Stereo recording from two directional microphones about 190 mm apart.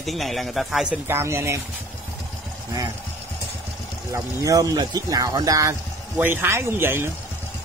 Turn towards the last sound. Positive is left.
turn(degrees=-10)  # may be behind; listen again after turning